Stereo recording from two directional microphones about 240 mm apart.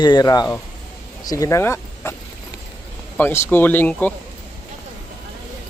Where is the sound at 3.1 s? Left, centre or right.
Centre.